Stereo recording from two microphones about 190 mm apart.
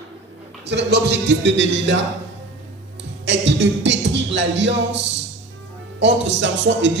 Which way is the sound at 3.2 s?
70° right (ahead or behind).